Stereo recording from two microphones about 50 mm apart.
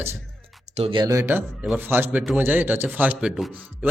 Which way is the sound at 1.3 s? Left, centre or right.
Right.